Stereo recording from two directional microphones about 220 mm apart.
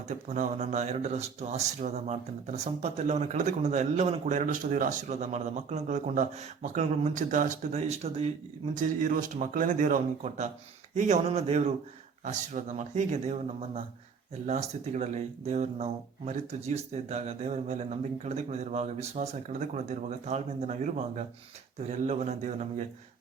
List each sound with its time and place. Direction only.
0.1 s speech: 35° right (ahead or behind)